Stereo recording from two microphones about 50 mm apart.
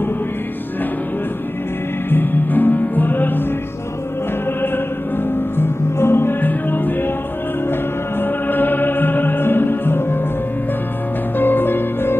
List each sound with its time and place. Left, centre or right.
2.0 s music: left
5.6 s music: left
8.2 s music: left
11.3 s music: left